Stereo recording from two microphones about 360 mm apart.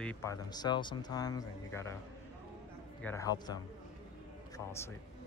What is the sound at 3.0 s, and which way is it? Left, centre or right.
Speech, centre.